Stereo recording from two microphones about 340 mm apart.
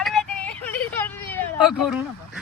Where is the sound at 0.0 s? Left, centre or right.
Centre.